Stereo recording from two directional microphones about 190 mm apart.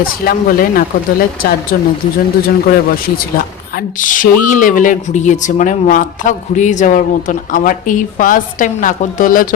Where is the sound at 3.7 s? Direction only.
45° left (ahead or behind).